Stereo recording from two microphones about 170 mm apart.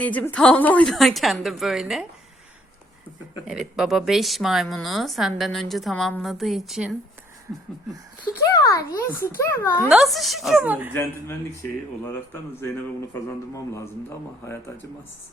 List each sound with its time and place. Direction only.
0.0 s speech: 10° left (ahead or behind)
3.4 s speech: 5° right (ahead or behind)
8.4 s a sound: 20° left (ahead or behind)
9.0 s a man's voice: 10° left (ahead or behind)
9.9 s speech: centre (ahead or behind)
10.9 s a man's voice: 10° left (ahead or behind)